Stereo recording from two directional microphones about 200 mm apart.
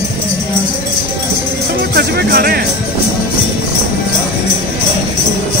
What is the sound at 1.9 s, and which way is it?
Music, 55° right (ahead or behind).